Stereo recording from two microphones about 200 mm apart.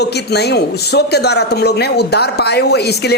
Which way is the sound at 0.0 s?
55° left (ahead or behind).